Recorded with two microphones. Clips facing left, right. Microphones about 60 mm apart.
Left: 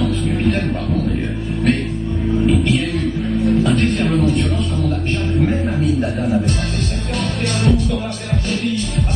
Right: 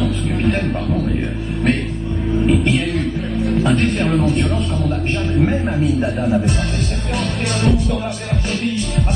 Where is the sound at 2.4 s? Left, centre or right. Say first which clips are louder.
Right 1 dB; centre.